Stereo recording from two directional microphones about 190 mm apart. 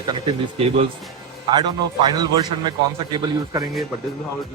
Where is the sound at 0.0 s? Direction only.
25° right (ahead or behind).